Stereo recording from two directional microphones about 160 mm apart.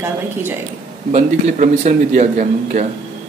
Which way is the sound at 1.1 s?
50° right (ahead or behind).